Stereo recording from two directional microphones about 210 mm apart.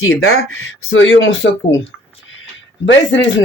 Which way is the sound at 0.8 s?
70° left (ahead or behind).